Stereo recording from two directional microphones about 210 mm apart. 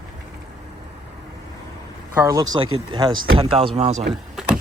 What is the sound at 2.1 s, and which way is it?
Speech, 15° right (ahead or behind).